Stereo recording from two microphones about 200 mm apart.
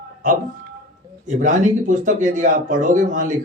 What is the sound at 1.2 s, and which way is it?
Speech, 40° right (ahead or behind).